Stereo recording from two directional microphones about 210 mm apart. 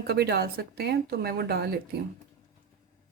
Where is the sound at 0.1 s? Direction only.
50° right (ahead or behind).